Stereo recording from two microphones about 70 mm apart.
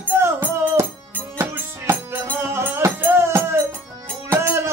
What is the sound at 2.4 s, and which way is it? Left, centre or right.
Music, right.